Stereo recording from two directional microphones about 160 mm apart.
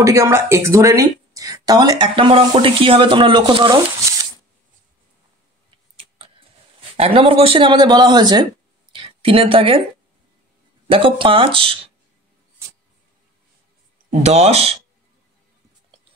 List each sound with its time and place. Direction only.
0.0 s speech: 20° right (ahead or behind)
5.9 s a sound: 35° right (ahead or behind)
7.0 s speech: 35° right (ahead or behind)
10.9 s speech: 35° right (ahead or behind)
14.2 s speech: 40° right (ahead or behind)